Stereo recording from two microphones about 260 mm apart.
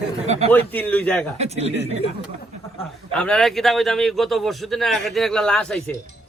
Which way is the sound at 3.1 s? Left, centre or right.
Centre.